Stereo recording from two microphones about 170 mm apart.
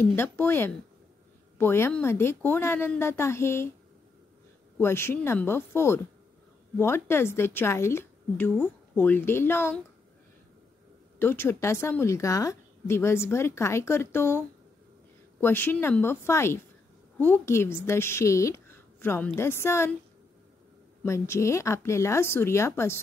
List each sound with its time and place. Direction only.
0.0 s a woman's voice: 15° left (ahead or behind)
4.7 s a woman's voice: 15° left (ahead or behind)
6.8 s a woman's voice: 15° left (ahead or behind)
11.1 s a woman's voice: 15° left (ahead or behind)
15.4 s a woman's voice: 10° left (ahead or behind)
21.0 s a woman's voice: 15° left (ahead or behind)